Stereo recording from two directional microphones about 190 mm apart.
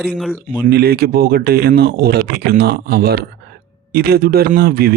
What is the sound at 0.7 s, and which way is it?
Speech, 55° right (ahead or behind).